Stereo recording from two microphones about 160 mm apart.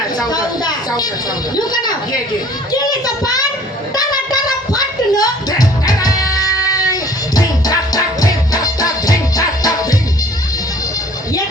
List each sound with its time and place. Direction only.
0.2 s a sound: 25° left (ahead or behind)
1.5 s a woman's voice: 25° left (ahead or behind)
3.9 s music: 25° left (ahead or behind)